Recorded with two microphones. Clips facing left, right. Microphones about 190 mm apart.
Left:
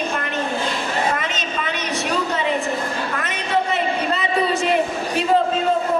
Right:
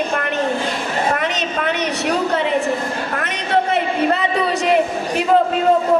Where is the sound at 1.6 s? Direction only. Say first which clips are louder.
Right 5 dB; 60° right (ahead or behind).